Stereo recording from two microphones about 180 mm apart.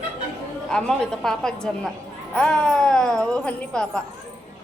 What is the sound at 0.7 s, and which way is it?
A woman's voice, 5° left (ahead or behind).